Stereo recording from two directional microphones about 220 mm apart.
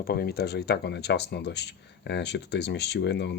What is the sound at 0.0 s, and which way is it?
Speech, 45° left (ahead or behind).